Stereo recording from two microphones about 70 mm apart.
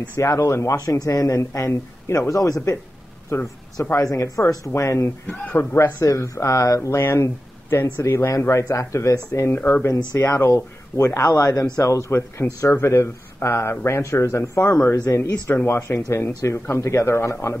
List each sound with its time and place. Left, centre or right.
0.2 s speech: left
0.7 s speech: left
3.3 s speech: left
5.2 s a man's voice: left
5.9 s speech: left
9.3 s speech: left
10.1 s speech: left
12.1 s speech: left
12.8 s speech: left